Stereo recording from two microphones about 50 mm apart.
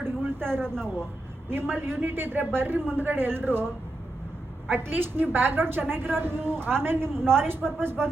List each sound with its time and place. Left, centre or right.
0.0 s a sound: right
0.6 s speech: centre
1.5 s a woman's voice: right
4.7 s a woman's voice: right